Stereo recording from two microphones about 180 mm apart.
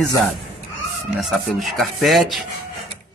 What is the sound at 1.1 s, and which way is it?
Speech, centre (ahead or behind).